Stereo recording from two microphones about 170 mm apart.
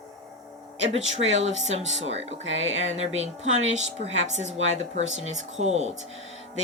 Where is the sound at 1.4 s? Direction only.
40° right (ahead or behind).